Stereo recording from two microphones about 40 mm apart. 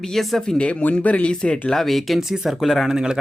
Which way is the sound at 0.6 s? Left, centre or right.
Left.